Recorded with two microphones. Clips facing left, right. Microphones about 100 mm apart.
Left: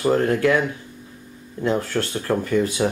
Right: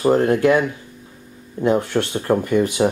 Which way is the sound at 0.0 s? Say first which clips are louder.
Right 3 dB; 25° right (ahead or behind).